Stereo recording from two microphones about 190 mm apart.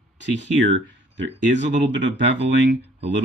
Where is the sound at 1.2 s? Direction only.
70° right (ahead or behind).